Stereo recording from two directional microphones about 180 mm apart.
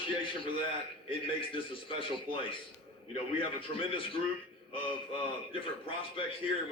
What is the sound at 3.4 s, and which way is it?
Speech, 30° left (ahead or behind).